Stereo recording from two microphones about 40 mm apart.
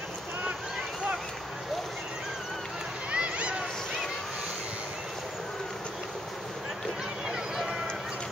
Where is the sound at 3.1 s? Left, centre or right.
Right.